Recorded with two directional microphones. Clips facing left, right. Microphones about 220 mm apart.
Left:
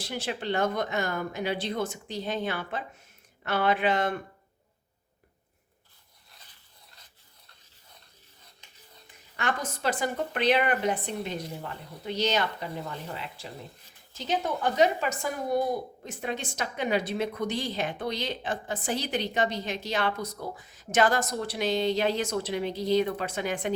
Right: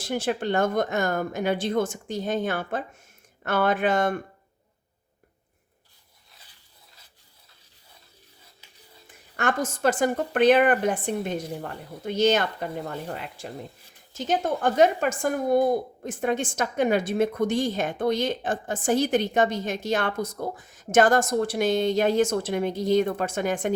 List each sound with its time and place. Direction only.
0.0 s speech: 50° right (ahead or behind)
9.0 s speech: 50° right (ahead or behind)